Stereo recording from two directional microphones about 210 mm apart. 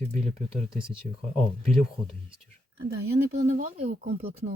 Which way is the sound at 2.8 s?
45° right (ahead or behind).